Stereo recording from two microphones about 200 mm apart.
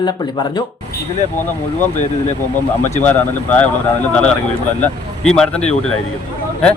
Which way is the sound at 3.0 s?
10° left (ahead or behind).